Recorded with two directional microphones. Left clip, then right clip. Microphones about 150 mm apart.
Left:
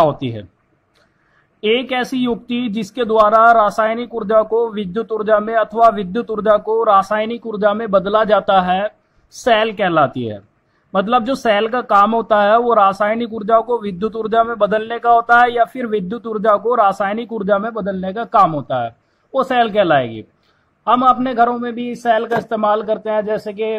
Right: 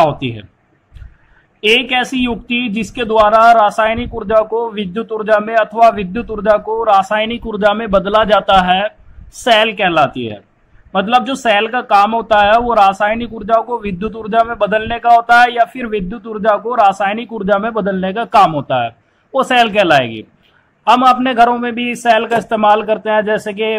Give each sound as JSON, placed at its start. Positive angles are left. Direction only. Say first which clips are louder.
{"t": 0.0, "sound": "speech", "louder": "right 2 dB", "side_deg": 45}
{"t": 1.6, "sound": "speech", "louder": "right 5 dB", "side_deg": 45}
{"t": 5.9, "sound": "speech", "louder": "even", "side_deg": 40}
{"t": 17.6, "sound": "speech", "louder": "right 5 dB", "side_deg": 20}
{"t": 19.3, "sound": "speech", "louder": "right 3 dB", "side_deg": 25}